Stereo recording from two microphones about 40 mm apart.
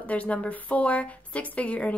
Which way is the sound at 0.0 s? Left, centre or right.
Left.